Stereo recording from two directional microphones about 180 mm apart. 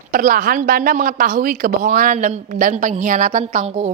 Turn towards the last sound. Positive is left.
turn(degrees=-40)  # may be behind; listen again after turning